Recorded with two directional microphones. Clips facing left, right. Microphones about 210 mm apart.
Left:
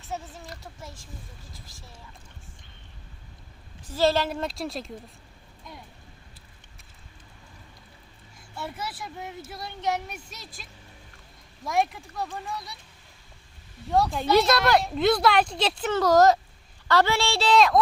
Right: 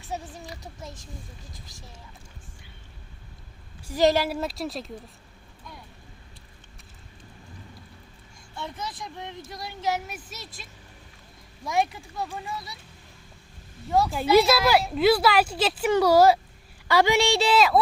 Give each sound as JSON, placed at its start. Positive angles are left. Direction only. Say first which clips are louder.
{"t": 0.1, "sound": "speech", "louder": "right 1 dB", "side_deg": -15}
{"t": 3.8, "sound": "a woman's voice", "louder": "right 2 dB", "side_deg": -15}
{"t": 8.5, "sound": "speech", "louder": "even", "side_deg": 5}
{"t": 13.9, "sound": "a woman's voice", "louder": "right 2 dB", "side_deg": -5}